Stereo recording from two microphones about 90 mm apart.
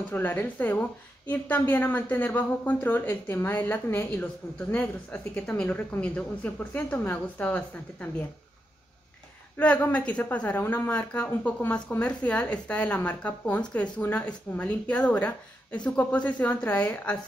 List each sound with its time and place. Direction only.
0.1 s a woman's voice: 20° left (ahead or behind)
9.6 s speech: 20° left (ahead or behind)